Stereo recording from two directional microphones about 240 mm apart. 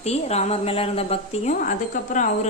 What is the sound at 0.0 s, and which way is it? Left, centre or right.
A woman's voice, left.